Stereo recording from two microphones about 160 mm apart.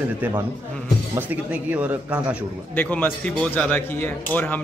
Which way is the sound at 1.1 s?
10° right (ahead or behind).